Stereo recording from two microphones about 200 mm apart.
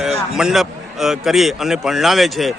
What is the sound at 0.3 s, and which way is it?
A man's voice, centre (ahead or behind).